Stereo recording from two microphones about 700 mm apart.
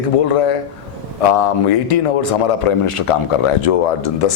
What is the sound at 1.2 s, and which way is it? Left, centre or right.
A man's voice, left.